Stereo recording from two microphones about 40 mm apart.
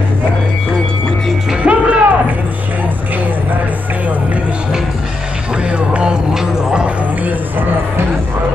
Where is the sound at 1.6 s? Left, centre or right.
Right.